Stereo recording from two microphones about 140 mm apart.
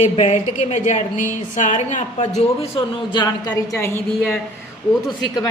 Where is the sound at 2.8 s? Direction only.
35° left (ahead or behind).